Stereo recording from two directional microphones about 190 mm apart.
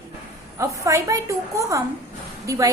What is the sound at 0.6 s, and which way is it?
A woman's voice, 15° right (ahead or behind).